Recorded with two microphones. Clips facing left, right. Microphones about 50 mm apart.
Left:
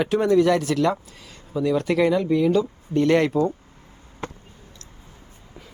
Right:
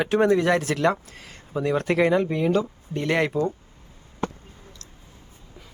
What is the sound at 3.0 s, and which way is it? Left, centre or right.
Speech, centre.